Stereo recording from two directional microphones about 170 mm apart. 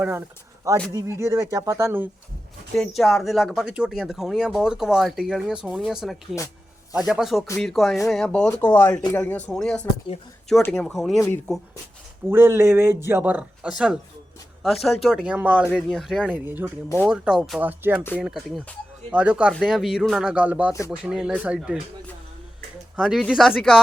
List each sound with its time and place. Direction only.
0.0 s speech: 10° right (ahead or behind)
2.7 s speech: centre (ahead or behind)
12.3 s speech: 15° right (ahead or behind)
23.0 s speech: 5° right (ahead or behind)